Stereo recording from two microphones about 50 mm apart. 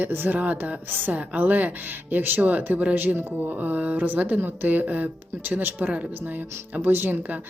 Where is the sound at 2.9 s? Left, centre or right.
Right.